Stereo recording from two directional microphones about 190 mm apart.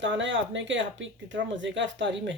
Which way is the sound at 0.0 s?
75° right (ahead or behind).